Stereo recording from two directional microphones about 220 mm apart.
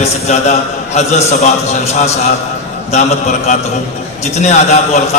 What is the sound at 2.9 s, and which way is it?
A man's voice, 30° left (ahead or behind).